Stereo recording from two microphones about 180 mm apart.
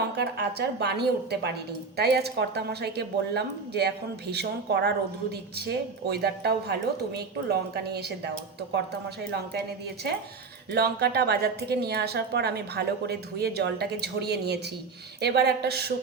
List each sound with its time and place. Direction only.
0.2 s a woman's voice: 70° right (ahead or behind)